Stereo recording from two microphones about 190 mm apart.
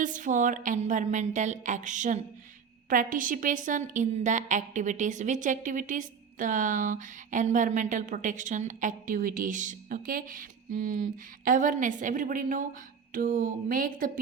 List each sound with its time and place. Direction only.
0.0 s a woman's voice: 45° right (ahead or behind)